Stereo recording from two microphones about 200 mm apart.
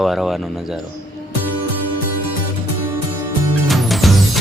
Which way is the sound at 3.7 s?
Centre (ahead or behind).